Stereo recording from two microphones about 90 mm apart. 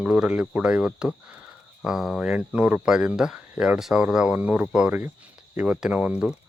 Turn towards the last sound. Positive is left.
turn(degrees=-10)  # may be behind; listen again after turning